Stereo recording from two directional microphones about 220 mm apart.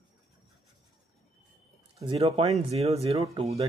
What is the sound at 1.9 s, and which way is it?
Speech, 20° right (ahead or behind).